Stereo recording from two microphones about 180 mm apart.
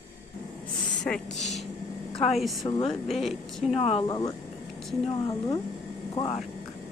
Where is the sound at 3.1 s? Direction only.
Centre (ahead or behind).